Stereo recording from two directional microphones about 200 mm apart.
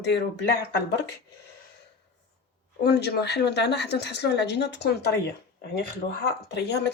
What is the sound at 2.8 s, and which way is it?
A woman's voice, 55° left (ahead or behind).